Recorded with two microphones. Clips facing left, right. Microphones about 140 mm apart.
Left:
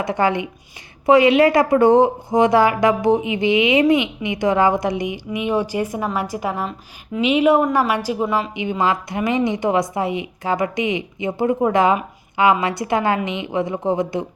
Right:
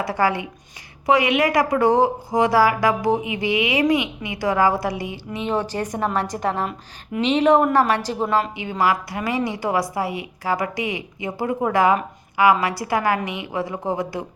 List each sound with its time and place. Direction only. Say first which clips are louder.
0.0 s a woman's voice: left 2 dB; 20° left (ahead or behind)